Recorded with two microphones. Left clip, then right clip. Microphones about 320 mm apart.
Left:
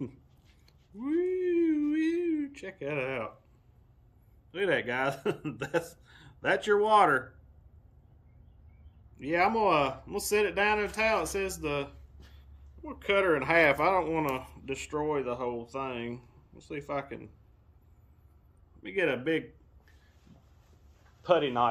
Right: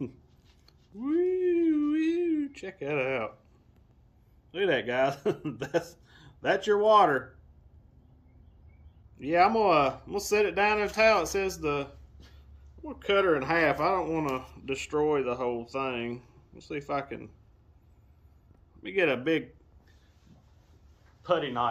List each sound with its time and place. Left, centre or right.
0.7 s a sound: centre
4.5 s speech: centre
9.1 s speech: centre
18.8 s speech: centre
21.2 s a man's voice: left